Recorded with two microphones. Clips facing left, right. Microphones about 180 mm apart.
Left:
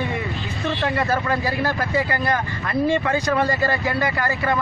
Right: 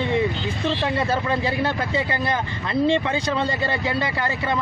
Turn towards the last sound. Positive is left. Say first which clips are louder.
# left 2 dB
turn(degrees=-25)  # may be behind; listen again after turning